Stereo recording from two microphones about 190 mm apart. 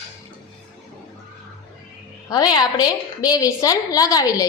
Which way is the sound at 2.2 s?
20° left (ahead or behind).